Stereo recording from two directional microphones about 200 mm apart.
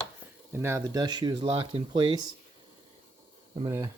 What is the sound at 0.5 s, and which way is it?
Speech, 15° right (ahead or behind).